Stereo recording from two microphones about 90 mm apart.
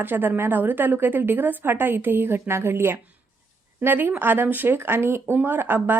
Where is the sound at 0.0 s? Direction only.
20° right (ahead or behind).